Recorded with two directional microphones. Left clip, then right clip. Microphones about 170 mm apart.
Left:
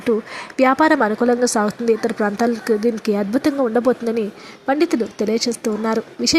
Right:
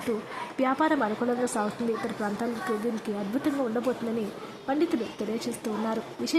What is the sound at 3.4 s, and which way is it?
Speech, 35° left (ahead or behind).